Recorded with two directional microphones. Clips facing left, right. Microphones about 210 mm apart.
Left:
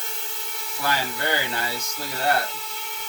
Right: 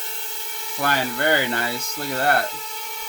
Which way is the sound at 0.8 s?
55° right (ahead or behind).